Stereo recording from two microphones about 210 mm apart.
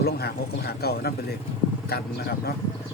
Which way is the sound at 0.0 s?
50° left (ahead or behind).